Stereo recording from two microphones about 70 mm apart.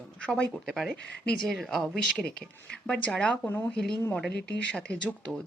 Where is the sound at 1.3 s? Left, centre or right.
Centre.